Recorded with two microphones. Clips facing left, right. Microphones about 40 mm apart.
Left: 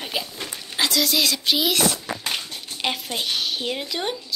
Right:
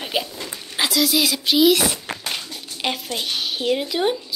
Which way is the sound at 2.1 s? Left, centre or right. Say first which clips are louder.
Even; right.